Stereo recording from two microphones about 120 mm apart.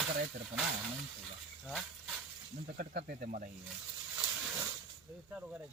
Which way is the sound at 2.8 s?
90° right.